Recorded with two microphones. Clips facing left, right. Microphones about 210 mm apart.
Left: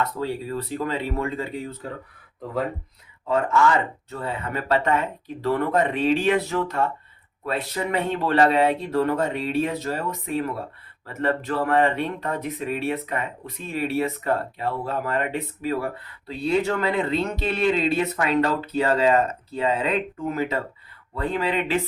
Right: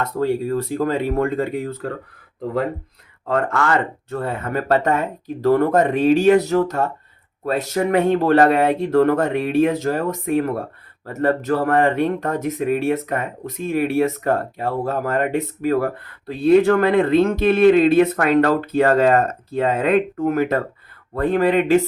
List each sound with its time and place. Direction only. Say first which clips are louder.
0.0 s speech: right 6 dB; 50° right (ahead or behind)
1.8 s speech: right 7 dB; 90° right
3.2 s speech: even; 60° right (ahead or behind)